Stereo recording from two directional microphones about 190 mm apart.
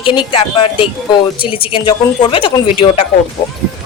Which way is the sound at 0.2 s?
25° left (ahead or behind).